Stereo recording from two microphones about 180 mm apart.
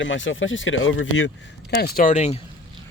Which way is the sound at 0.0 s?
90° left.